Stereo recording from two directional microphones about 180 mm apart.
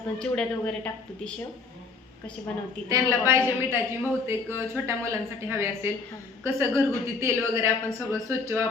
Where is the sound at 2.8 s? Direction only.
15° right (ahead or behind).